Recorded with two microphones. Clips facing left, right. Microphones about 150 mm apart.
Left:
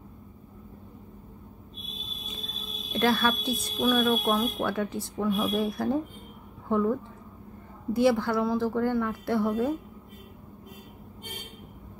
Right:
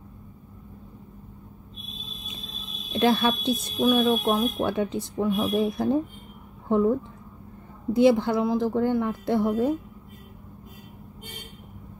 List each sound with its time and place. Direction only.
2.9 s speech: 20° right (ahead or behind)